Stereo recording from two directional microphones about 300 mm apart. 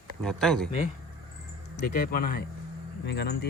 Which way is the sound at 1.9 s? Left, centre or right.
Left.